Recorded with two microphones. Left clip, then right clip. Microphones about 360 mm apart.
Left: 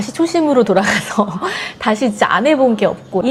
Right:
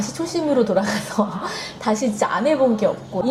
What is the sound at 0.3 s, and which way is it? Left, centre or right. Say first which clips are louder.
Speech: left 6 dB; left.